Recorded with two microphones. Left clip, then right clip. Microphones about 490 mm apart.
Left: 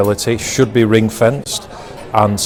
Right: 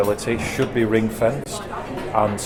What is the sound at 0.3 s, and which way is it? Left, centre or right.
Speech, left.